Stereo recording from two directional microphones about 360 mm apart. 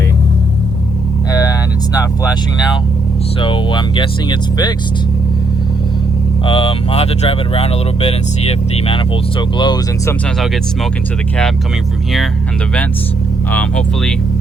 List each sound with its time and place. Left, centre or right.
1.3 s a sound: centre
3.4 s speech: centre
6.4 s speech: centre
13.5 s speech: centre